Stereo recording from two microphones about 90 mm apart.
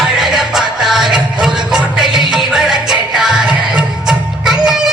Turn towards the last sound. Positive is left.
turn(degrees=-5)  # may be behind; listen again after turning